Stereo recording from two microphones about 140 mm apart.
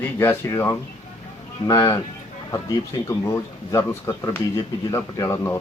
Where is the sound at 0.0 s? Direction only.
15° left (ahead or behind).